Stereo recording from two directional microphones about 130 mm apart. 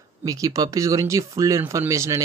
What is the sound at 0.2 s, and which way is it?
Speech, 25° right (ahead or behind).